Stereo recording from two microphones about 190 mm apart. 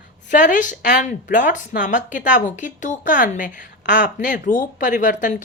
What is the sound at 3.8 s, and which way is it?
Speech, 65° left (ahead or behind).